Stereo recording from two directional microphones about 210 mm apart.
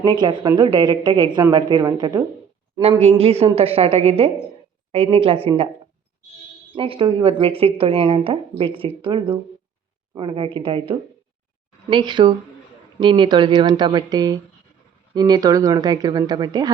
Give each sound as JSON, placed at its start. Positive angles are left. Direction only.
{"t": 0.0, "sound": "speech", "side_deg": -20}
{"t": 6.7, "sound": "speech", "side_deg": -25}